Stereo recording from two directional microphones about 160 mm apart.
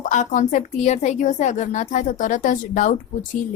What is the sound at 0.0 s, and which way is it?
A woman's voice, 50° left (ahead or behind).